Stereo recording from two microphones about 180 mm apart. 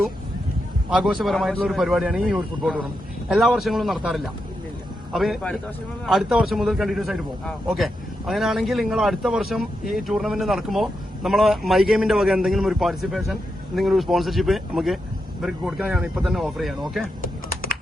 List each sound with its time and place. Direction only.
0.9 s speech: centre (ahead or behind)
17.5 s typing: 55° left (ahead or behind)